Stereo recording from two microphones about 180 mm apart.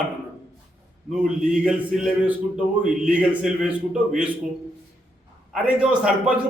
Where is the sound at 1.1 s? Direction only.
5° right (ahead or behind).